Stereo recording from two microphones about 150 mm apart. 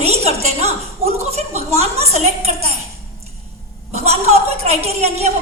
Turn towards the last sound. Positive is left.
turn(degrees=-45)  # may be behind; listen again after turning